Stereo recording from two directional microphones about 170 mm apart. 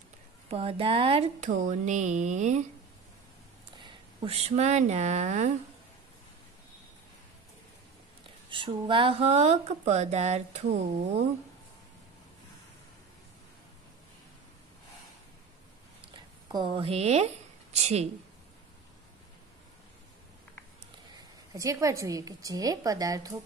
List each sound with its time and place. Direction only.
0.5 s speech: 35° right (ahead or behind)
3.8 s speech: 35° right (ahead or behind)
8.5 s speech: 30° right (ahead or behind)
16.1 s speech: 25° right (ahead or behind)
21.1 s a woman's voice: 20° right (ahead or behind)